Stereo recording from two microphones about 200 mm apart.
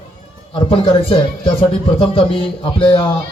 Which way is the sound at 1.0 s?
25° left (ahead or behind).